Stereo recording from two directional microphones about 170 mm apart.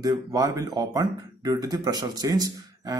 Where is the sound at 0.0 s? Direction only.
20° right (ahead or behind).